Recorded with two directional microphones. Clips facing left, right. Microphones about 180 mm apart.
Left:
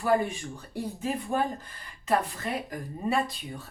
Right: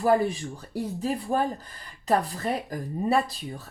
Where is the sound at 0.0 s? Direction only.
35° right (ahead or behind).